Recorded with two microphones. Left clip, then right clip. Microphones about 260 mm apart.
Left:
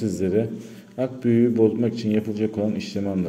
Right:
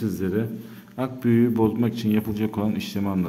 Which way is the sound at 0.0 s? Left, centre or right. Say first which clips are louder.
Left 4 dB; centre.